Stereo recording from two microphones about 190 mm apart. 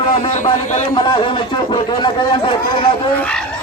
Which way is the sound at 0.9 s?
25° left (ahead or behind).